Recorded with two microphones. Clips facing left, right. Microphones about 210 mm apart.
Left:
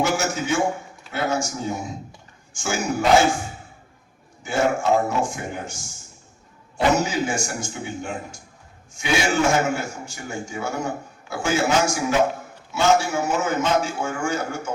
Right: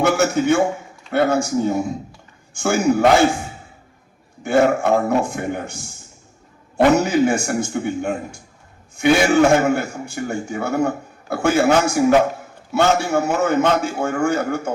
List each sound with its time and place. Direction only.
0.0 s a man's voice: 60° right (ahead or behind)
4.4 s a man's voice: 60° right (ahead or behind)